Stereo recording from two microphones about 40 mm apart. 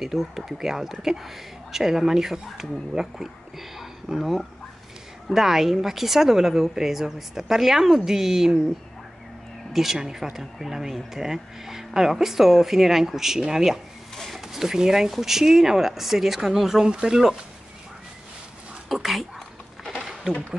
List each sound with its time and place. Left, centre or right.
0.0 s speech: centre
9.7 s speech: centre
14.1 s a sound: centre
14.5 s speech: centre
16.8 s speech: centre
18.9 s speech: centre